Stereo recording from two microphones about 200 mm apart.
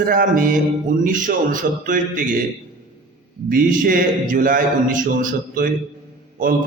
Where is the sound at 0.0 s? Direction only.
45° right (ahead or behind).